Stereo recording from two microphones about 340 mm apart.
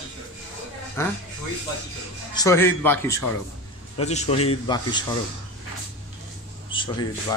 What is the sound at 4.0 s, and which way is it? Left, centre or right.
A man's voice, centre.